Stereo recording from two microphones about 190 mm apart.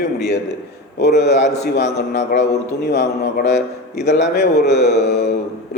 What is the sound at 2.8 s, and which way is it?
Speech, 60° left (ahead or behind).